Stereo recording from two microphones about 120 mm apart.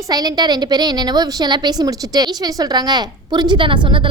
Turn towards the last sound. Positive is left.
turn(degrees=-45)  # may be behind; listen again after turning